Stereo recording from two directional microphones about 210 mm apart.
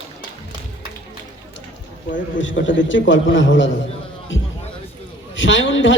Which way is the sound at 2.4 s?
65° left (ahead or behind).